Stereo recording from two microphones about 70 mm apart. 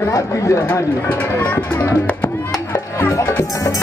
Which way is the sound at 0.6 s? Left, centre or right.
Left.